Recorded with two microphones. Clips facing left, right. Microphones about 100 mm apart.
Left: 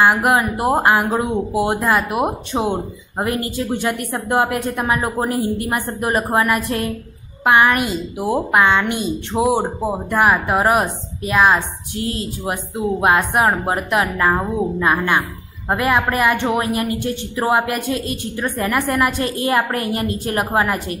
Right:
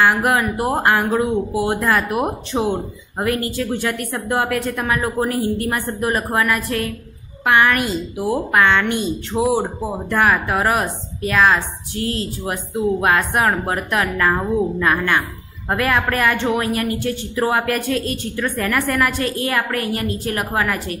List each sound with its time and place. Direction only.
0.2 s speech: 20° left (ahead or behind)